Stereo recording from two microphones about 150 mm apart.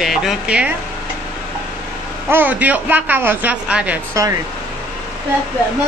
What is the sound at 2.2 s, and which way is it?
Speech, 15° right (ahead or behind).